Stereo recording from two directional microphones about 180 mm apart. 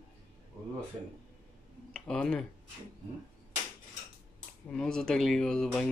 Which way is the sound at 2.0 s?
5° left (ahead or behind).